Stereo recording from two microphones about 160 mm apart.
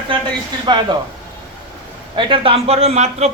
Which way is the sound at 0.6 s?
25° right (ahead or behind).